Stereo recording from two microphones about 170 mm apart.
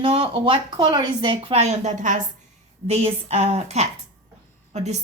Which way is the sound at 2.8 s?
35° right (ahead or behind).